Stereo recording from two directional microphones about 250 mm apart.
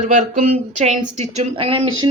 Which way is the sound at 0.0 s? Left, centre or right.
Right.